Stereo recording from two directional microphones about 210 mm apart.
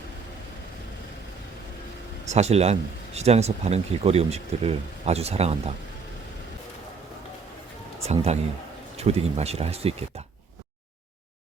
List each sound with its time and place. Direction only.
2.2 s speech: 30° right (ahead or behind)
8.0 s speech: 30° right (ahead or behind)